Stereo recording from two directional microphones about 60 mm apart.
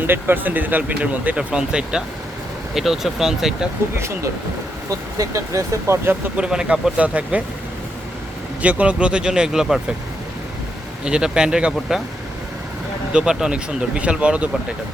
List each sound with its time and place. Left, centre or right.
0.1 s speech: right; by 3.7 s centre
3.9 s speech: right
4.9 s speech: right
6.3 s speech: centre
8.6 s speech: right; by 9.8 s centre
11.0 s speech: centre
13.1 s speech: centre